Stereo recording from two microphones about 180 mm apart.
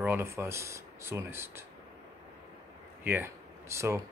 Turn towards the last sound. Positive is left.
turn(degrees=-15)  # may be behind; listen again after turning